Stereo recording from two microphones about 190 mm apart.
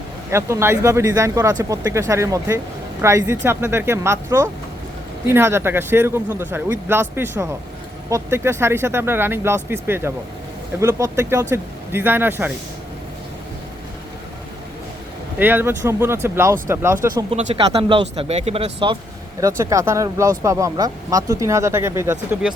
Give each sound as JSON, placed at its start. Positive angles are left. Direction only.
{"t": 0.3, "sound": "speech", "side_deg": -15}
{"t": 15.4, "sound": "speech", "side_deg": -10}
{"t": 17.3, "sound": "speech", "side_deg": -35}
{"t": 19.4, "sound": "speech", "side_deg": -15}